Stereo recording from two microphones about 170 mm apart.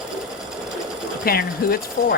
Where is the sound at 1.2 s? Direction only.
60° left (ahead or behind).